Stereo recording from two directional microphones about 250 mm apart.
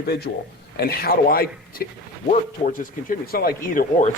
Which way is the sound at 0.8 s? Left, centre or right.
Left.